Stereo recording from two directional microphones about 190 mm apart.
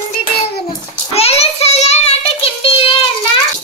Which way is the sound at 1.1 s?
30° left (ahead or behind).